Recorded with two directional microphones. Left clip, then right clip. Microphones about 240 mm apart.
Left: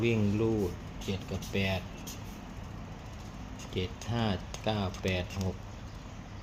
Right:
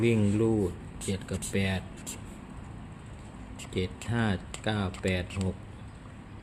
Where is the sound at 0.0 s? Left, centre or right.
Right.